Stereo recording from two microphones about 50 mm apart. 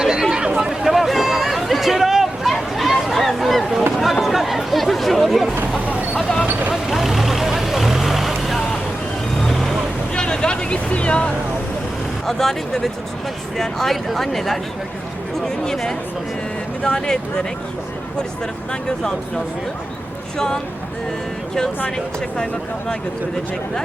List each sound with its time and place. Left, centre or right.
0.0 s chatter: centre
0.6 s a sound: centre
3.9 s chatter: centre
6.5 s vehicle: right
6.8 s vehicle: centre
10.2 s vehicle: centre
12.2 s speech: centre
18.7 s speech: centre
21.8 s speech: centre